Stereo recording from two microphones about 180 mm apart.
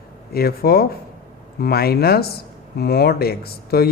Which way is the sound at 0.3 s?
60° left (ahead or behind).